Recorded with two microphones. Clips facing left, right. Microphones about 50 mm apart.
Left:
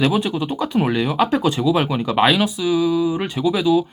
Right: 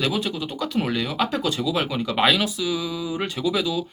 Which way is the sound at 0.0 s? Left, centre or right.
Left.